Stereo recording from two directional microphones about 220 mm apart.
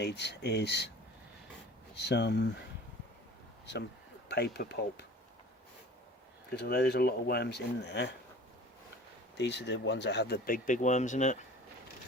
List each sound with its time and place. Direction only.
0.0 s speech: 50° left (ahead or behind)
2.0 s speech: 50° left (ahead or behind)
4.3 s speech: 50° left (ahead or behind)
6.6 s speech: 45° left (ahead or behind)
9.4 s speech: 50° left (ahead or behind); by 11.4 s 35° left (ahead or behind)